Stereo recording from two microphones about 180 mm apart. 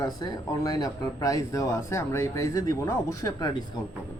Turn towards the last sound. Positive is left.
turn(degrees=20)  # may be behind; listen again after turning